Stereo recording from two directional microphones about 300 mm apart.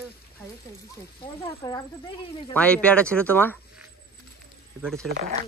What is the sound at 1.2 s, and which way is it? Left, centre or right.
Speech, centre.